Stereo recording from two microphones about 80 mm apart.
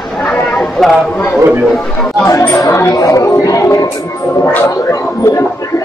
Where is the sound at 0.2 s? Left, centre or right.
Centre.